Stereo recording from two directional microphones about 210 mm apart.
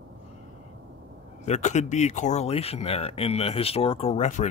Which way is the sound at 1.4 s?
35° left (ahead or behind).